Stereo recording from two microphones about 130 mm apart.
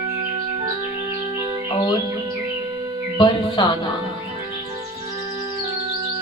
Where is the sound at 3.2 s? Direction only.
35° left (ahead or behind).